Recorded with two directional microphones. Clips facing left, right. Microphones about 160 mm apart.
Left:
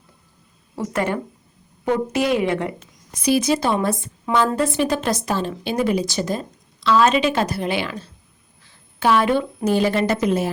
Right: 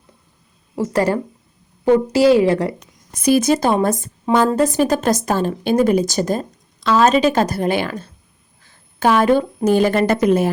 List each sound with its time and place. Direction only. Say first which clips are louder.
0.8 s a woman's voice: right 5 dB; 35° right (ahead or behind)
2.8 s a woman's voice: right 4 dB; 50° right (ahead or behind)